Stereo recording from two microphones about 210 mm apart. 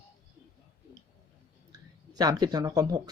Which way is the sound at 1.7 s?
20° right (ahead or behind).